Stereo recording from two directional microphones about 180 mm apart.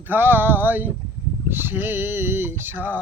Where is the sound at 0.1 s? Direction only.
10° right (ahead or behind).